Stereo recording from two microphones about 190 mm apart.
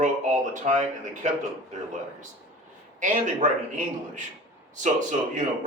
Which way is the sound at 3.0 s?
40° right (ahead or behind).